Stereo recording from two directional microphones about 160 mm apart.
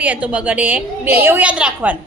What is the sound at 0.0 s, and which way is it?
A woman's voice, 10° right (ahead or behind).